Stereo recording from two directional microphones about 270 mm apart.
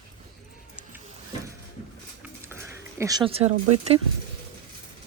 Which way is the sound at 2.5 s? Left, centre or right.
Centre.